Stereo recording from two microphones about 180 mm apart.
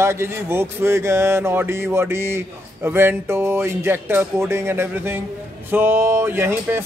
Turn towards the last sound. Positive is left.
turn(degrees=-10)  # may be behind; listen again after turning